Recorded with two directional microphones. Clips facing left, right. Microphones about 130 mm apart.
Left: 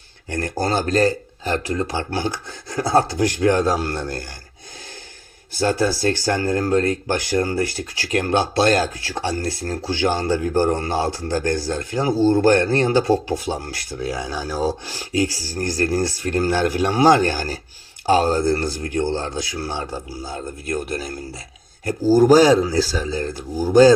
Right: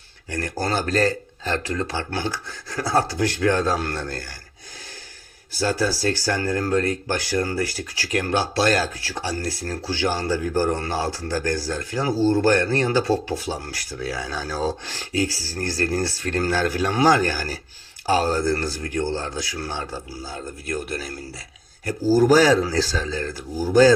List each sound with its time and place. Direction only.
0.3 s speech: 25° left (ahead or behind)
5.5 s speech: 25° left (ahead or behind)
22.3 s speech: 20° left (ahead or behind)